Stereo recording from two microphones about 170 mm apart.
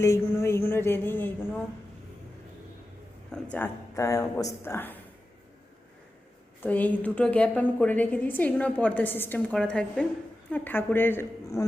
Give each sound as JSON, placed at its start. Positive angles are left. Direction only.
{"t": 0.0, "sound": "a woman's voice", "side_deg": 15}
{"t": 3.3, "sound": "a woman's voice", "side_deg": 5}
{"t": 3.9, "sound": "a woman's voice", "side_deg": 20}
{"t": 6.6, "sound": "a woman's voice", "side_deg": 10}